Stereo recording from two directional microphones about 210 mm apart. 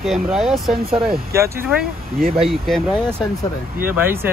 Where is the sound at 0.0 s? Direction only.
Centre (ahead or behind).